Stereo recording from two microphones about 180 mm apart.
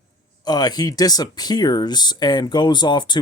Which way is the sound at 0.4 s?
20° left (ahead or behind).